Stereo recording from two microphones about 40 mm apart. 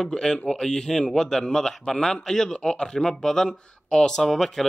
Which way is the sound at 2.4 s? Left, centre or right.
Left.